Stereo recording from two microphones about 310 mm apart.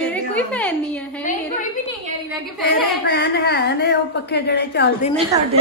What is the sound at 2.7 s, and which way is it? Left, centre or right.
Speech, centre.